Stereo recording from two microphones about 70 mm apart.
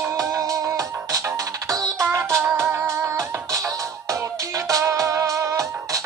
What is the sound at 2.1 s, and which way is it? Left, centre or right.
Music, right.